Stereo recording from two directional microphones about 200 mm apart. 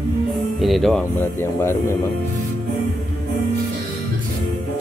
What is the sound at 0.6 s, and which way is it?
Speech, centre (ahead or behind).